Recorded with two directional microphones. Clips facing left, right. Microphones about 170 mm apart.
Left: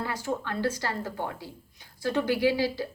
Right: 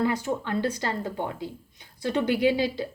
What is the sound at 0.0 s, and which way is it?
A woman's voice, 20° right (ahead or behind).